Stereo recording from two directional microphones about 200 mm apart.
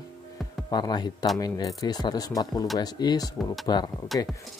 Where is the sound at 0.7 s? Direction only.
20° left (ahead or behind).